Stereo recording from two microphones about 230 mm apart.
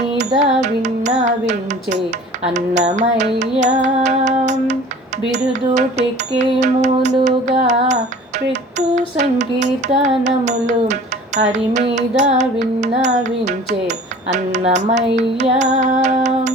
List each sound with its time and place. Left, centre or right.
0.2 s music: right
9.0 s music: right